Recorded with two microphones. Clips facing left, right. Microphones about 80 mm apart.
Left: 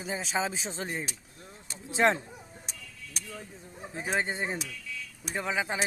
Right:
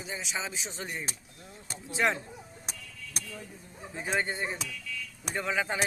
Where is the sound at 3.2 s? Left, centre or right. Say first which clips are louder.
Right 1 dB; right.